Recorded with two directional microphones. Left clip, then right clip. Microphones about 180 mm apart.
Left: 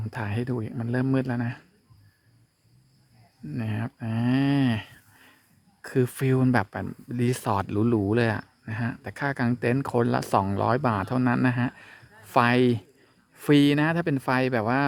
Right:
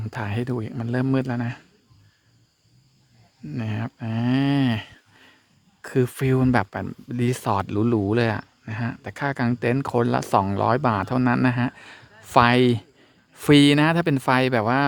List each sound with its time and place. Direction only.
0.0 s speech: 20° right (ahead or behind)
3.5 s speech: 15° right (ahead or behind)